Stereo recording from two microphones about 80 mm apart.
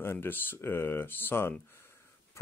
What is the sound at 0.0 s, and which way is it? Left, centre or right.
Speech, left.